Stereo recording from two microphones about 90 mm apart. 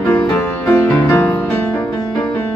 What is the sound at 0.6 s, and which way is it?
Music, 30° left (ahead or behind).